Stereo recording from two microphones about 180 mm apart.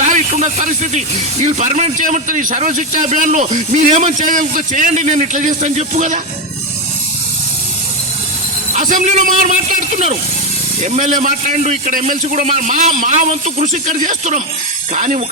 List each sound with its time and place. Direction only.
0.0 s speech: 45° right (ahead or behind)
8.7 s a man's voice: 45° right (ahead or behind)